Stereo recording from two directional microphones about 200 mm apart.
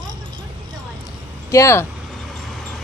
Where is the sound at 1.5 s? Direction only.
15° left (ahead or behind).